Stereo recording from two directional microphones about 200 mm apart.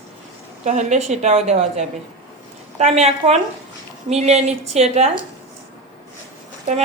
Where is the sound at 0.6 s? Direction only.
35° right (ahead or behind).